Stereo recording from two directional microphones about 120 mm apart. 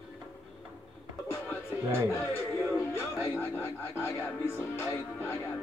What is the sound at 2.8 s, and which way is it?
Music, 25° left (ahead or behind).